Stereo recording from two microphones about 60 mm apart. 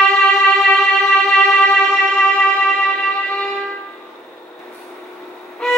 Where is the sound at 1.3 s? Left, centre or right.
Centre.